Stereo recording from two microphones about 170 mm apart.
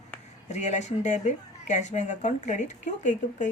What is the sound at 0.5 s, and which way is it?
A woman's voice, 45° left (ahead or behind).